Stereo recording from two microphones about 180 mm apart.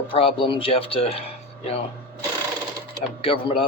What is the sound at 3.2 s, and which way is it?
Speech, 30° left (ahead or behind).